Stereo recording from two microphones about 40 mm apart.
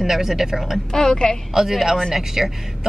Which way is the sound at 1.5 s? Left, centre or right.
Centre.